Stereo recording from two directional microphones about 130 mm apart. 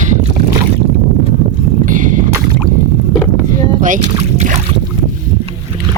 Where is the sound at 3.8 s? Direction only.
80° right.